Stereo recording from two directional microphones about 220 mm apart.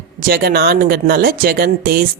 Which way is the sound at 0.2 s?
45° right (ahead or behind).